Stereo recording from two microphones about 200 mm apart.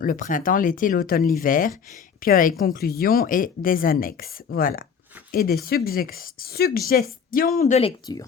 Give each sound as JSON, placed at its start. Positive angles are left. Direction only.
{"t": 0.0, "sound": "speech", "side_deg": 40}
{"t": 7.8, "sound": "speech", "side_deg": 25}